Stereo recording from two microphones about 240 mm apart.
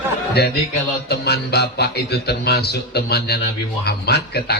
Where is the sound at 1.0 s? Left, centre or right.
Left.